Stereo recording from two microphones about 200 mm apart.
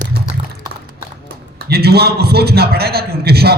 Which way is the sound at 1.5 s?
50° right (ahead or behind).